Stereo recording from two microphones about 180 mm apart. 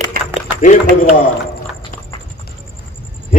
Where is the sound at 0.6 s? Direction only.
45° left (ahead or behind).